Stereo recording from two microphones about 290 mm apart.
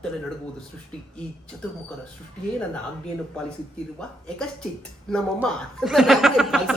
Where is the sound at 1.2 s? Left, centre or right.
Centre.